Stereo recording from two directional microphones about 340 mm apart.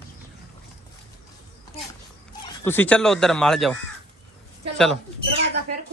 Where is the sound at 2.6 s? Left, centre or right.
Centre.